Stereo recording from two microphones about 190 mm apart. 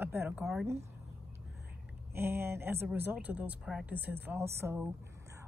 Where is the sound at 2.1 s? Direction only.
10° right (ahead or behind).